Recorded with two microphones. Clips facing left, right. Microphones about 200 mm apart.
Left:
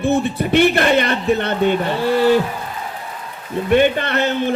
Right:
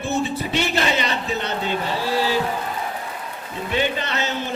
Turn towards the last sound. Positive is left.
turn(degrees=55)  # may be behind; listen again after turning